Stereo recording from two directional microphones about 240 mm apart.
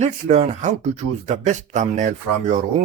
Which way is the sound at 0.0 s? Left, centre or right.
Right.